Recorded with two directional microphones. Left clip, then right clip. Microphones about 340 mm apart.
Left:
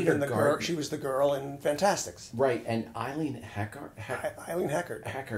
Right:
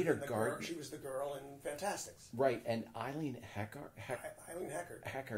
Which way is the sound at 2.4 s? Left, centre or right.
Right.